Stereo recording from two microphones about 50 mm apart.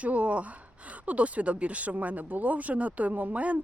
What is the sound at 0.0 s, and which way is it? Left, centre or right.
Speech, right.